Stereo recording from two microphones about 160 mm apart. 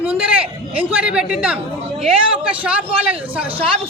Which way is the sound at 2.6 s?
5° right (ahead or behind).